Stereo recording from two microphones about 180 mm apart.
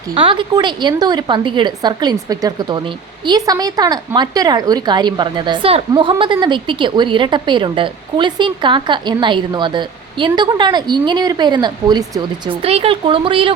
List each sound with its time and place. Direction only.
0.1 s a woman's voice: 30° right (ahead or behind)